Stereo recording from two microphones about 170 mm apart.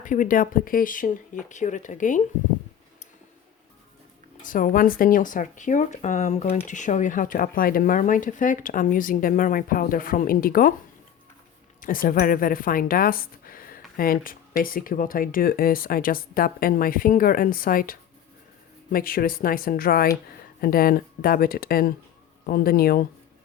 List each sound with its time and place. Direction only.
0.0 s speech: 50° left (ahead or behind)
4.4 s speech: 55° left (ahead or behind)
11.8 s speech: 55° left (ahead or behind)